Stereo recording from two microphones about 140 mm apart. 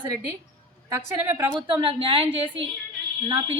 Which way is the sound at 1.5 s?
35° right (ahead or behind).